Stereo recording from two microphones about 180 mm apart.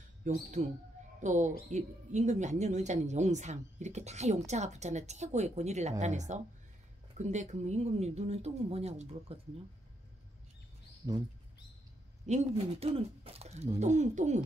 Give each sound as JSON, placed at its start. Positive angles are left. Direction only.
{"t": 0.2, "sound": "speech", "side_deg": -45}
{"t": 12.3, "sound": "speech", "side_deg": -40}